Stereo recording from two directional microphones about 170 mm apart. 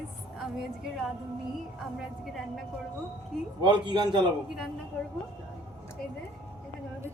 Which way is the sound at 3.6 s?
25° right (ahead or behind).